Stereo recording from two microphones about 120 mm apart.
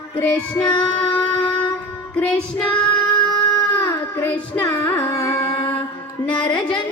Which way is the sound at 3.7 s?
15° left (ahead or behind).